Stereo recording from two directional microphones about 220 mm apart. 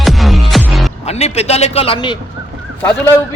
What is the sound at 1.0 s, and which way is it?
A man's voice, 30° left (ahead or behind).